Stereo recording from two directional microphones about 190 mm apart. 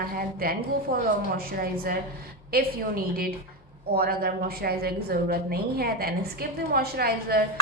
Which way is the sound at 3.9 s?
50° right (ahead or behind).